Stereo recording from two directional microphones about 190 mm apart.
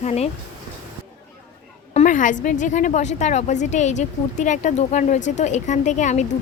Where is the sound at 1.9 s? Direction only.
40° left (ahead or behind).